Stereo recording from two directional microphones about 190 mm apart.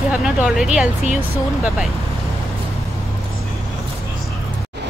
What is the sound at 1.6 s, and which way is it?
Speech, centre (ahead or behind).